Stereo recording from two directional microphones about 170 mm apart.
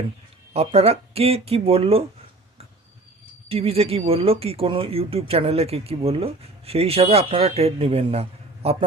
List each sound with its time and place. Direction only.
0.5 s speech: 35° right (ahead or behind)
3.5 s speech: 35° right (ahead or behind)